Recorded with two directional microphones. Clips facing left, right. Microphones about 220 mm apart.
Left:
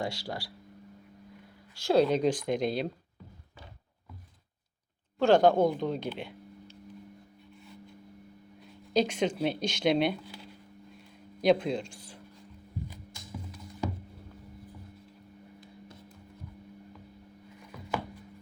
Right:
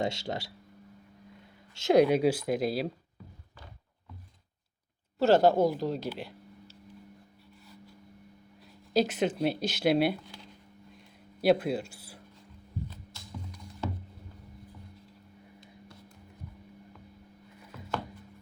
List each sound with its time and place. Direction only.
0.0 s speech: 25° right (ahead or behind)
1.7 s speech: 20° right (ahead or behind)
5.2 s speech: 5° right (ahead or behind)
8.6 s a sound: 5° right (ahead or behind)
9.4 s speech: 5° right (ahead or behind)
12.9 s music: 10° left (ahead or behind)